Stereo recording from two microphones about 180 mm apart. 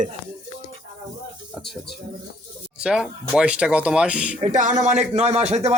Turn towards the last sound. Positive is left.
turn(degrees=-35)  # may be behind; listen again after turning